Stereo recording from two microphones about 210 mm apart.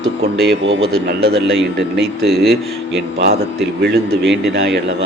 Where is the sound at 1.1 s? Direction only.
50° right (ahead or behind).